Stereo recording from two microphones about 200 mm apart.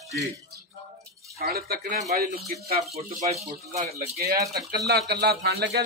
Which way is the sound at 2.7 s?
35° right (ahead or behind).